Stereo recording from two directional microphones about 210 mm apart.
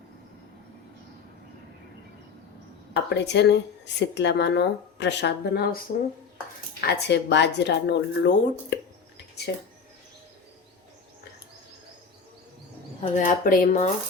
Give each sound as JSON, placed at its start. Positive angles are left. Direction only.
{"t": 2.9, "sound": "speech", "side_deg": 55}
{"t": 6.8, "sound": "speech", "side_deg": 55}
{"t": 13.0, "sound": "speech", "side_deg": 35}